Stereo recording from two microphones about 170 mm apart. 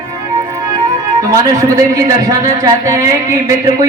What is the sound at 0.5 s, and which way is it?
Speech, 20° right (ahead or behind).